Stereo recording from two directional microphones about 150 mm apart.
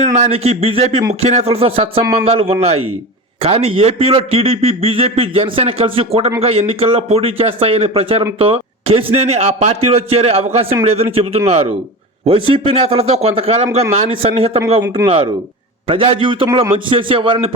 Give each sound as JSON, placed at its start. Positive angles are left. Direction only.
{"t": 0.0, "sound": "a man's voice", "side_deg": -45}
{"t": 8.4, "sound": "a sound", "side_deg": -40}
{"t": 9.1, "sound": "a man's voice", "side_deg": -45}